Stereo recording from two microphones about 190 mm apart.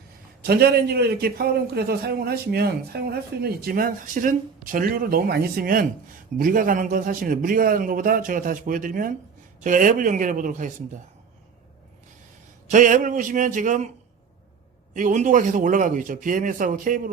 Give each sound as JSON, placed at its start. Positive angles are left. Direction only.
{"t": 0.4, "sound": "a man's voice", "side_deg": -55}
{"t": 12.7, "sound": "a man's voice", "side_deg": -40}
{"t": 14.9, "sound": "a man's voice", "side_deg": -40}